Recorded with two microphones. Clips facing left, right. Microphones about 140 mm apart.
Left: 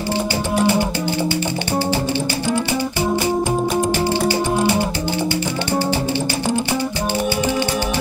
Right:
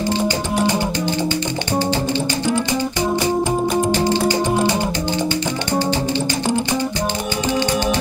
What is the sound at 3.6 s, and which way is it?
Music, centre (ahead or behind).